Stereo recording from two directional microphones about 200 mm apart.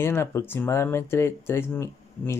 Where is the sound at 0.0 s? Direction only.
10° left (ahead or behind).